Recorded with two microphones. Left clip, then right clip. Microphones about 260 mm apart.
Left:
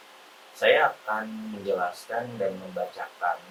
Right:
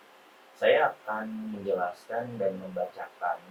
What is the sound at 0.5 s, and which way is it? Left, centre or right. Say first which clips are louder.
Speech: left 2 dB; centre.